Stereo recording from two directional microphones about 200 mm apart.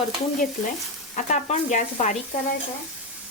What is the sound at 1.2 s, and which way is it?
Speech, 35° left (ahead or behind).